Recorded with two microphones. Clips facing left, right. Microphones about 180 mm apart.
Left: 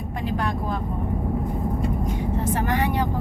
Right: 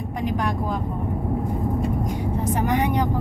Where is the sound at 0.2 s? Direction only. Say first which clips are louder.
Right 2 dB; 15° right (ahead or behind).